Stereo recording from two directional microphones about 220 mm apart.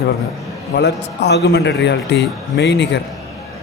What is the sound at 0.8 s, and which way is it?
Speech, 50° left (ahead or behind).